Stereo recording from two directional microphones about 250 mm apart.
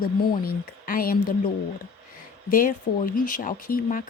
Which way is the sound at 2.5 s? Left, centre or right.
Left.